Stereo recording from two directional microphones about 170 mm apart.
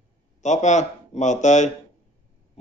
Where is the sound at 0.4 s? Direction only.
45° left (ahead or behind).